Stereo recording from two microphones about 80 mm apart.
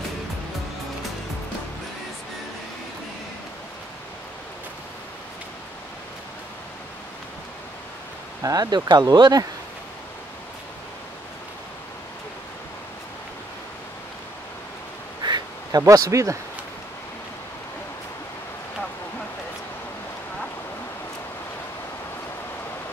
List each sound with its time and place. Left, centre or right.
8.4 s speech: right
15.2 s quack: right
15.8 s speech: right